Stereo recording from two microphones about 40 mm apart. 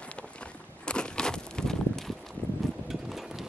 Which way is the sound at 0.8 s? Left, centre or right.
Left.